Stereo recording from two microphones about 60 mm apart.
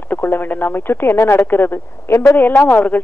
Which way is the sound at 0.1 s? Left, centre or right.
Left.